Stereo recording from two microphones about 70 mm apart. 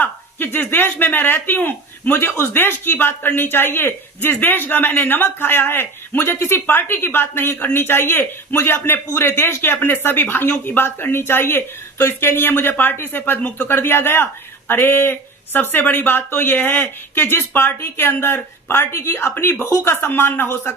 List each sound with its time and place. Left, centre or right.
0.0 s speech: left